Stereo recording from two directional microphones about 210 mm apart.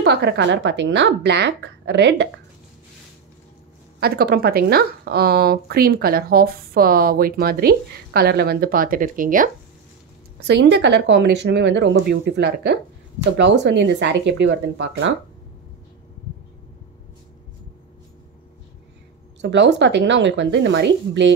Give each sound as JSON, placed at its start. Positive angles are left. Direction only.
{"t": 0.0, "sound": "speech", "side_deg": -55}
{"t": 4.0, "sound": "speech", "side_deg": -45}
{"t": 10.4, "sound": "speech", "side_deg": -55}
{"t": 19.4, "sound": "speech", "side_deg": -55}